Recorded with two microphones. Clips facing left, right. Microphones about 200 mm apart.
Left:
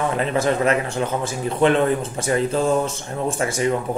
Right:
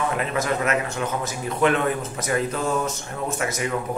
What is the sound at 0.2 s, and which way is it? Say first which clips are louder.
A man's voice: left 5 dB; 30° left (ahead or behind).